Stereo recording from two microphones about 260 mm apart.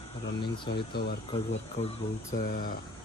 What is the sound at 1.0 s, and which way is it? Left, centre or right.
Speech, left.